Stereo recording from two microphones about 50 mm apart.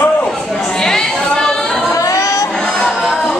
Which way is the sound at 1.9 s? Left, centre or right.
Left.